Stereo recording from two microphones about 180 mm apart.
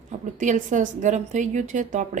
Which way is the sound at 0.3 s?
45° right (ahead or behind).